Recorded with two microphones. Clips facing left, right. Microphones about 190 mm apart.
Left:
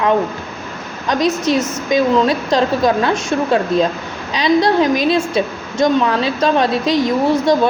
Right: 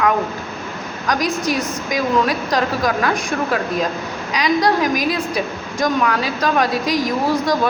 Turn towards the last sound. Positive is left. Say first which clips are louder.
# left 4 dB
turn(degrees=25)  # may be behind; listen again after turning